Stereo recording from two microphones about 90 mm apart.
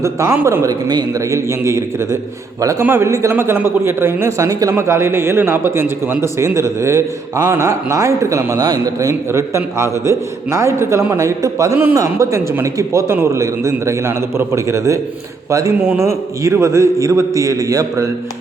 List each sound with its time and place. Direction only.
0.4 s a man's voice: 35° right (ahead or behind)